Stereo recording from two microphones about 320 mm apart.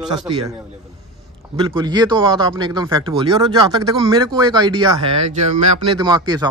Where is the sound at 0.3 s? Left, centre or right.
Centre.